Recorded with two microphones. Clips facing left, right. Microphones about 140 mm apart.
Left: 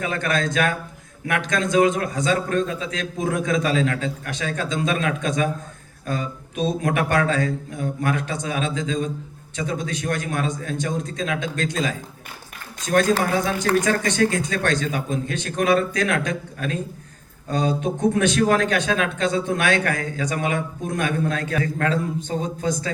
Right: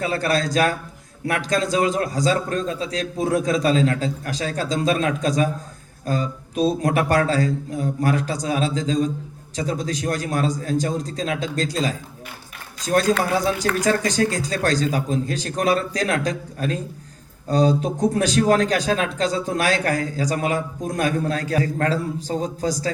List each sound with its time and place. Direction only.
0.0 s a man's voice: 35° right (ahead or behind)